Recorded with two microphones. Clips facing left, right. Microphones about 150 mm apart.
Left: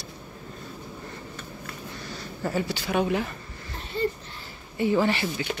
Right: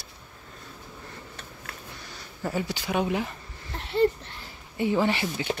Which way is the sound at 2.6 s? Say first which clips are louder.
Left 1 dB; 15° right (ahead or behind).